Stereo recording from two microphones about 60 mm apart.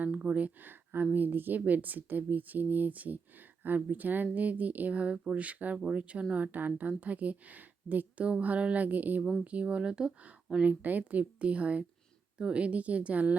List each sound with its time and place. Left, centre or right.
0.0 s a woman's voice: centre